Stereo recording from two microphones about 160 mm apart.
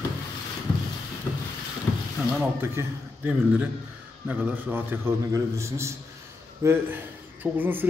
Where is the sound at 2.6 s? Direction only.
15° right (ahead or behind).